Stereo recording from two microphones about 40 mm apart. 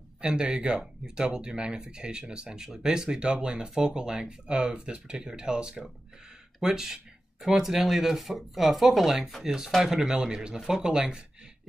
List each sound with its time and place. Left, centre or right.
0.2 s speech: right